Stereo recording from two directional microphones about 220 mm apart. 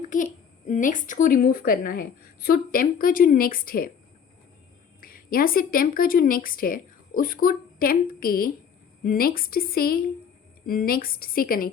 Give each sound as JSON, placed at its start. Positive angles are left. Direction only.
{"t": 0.7, "sound": "a woman's voice", "side_deg": 35}
{"t": 4.9, "sound": "a woman's voice", "side_deg": 40}